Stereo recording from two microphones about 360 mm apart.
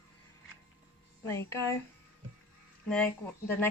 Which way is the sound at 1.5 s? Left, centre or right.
Centre.